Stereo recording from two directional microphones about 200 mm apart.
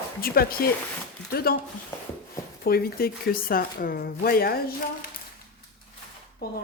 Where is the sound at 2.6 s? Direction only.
50° left (ahead or behind).